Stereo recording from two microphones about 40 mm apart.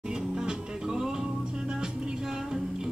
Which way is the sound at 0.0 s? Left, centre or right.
Centre.